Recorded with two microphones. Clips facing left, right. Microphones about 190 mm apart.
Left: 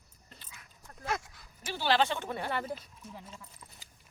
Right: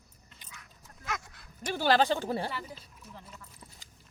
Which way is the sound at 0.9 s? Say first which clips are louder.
Left 5 dB; 45° left (ahead or behind).